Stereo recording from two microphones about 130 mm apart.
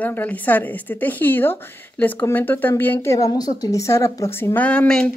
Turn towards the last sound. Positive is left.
turn(degrees=5)  # may be behind; listen again after turning